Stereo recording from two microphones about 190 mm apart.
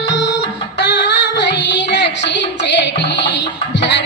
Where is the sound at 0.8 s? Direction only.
65° left (ahead or behind).